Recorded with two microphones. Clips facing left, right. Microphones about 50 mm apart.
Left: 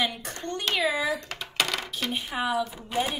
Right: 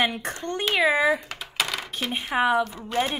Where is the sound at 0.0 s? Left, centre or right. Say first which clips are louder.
Right 4 dB; right.